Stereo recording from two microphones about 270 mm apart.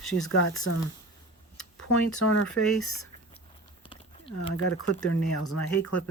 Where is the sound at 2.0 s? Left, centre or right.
Left.